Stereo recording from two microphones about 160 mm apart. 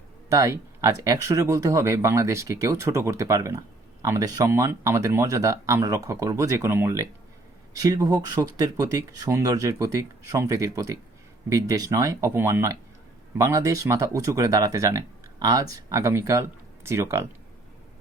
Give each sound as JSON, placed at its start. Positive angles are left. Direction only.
{"t": 0.3, "sound": "speech", "side_deg": -20}